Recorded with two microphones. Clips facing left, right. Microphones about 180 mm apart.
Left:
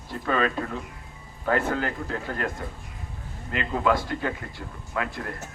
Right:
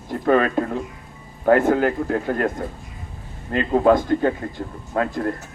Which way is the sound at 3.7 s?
45° right (ahead or behind).